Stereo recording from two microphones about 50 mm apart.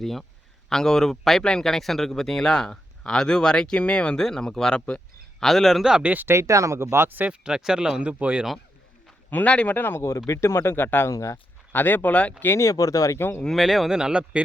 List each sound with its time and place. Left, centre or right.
0.0 s a man's voice: centre
6.0 s speech: right
6.2 s speech: right
7.1 s speech: right
7.4 s speech: centre
9.3 s speech: left
9.7 s speech: left
10.0 s speech: left
12.5 s speech: left
13.1 s speech: left
13.4 s speech: centre
13.9 s speech: centre